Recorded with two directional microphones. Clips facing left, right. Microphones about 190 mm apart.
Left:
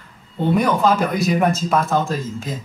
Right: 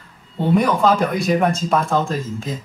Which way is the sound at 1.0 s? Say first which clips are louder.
Right 1 dB; 5° left (ahead or behind).